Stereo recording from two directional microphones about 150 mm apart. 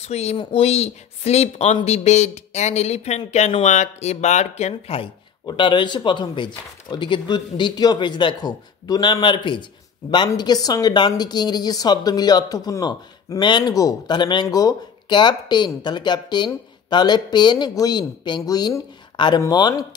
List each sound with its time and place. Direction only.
0.0 s speech: 45° left (ahead or behind); by 19.9 s 25° left (ahead or behind)